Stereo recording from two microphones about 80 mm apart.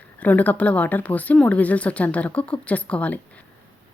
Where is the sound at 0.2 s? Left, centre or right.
Centre.